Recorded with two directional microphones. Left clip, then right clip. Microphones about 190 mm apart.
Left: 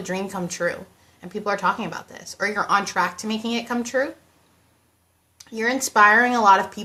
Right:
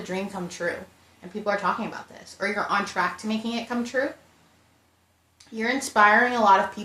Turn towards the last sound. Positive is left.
turn(degrees=30)  # may be behind; listen again after turning